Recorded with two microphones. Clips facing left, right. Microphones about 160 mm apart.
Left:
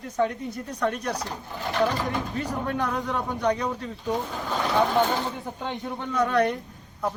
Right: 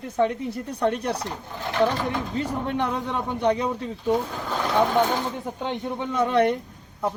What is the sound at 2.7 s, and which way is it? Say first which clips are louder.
Speech: right 1 dB; 25° right (ahead or behind).